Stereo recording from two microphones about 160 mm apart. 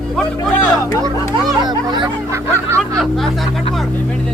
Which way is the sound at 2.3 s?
15° right (ahead or behind).